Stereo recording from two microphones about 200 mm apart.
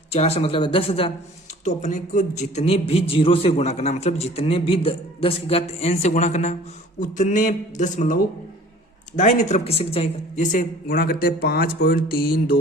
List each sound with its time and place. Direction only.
0.1 s a man's voice: 30° left (ahead or behind); by 12.5 s 45° left (ahead or behind)